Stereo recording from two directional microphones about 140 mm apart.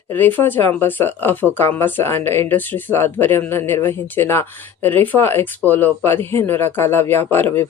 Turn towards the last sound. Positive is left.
turn(degrees=15)  # may be behind; listen again after turning